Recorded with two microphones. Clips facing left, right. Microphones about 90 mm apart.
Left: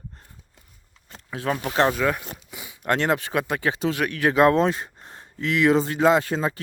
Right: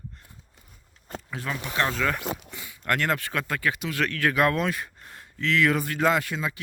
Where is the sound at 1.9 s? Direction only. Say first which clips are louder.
Left 3 dB; 10° left (ahead or behind); by 6.6 s 35° left (ahead or behind).